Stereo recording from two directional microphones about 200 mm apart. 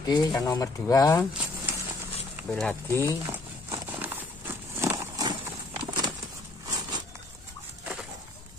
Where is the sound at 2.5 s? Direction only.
Centre (ahead or behind).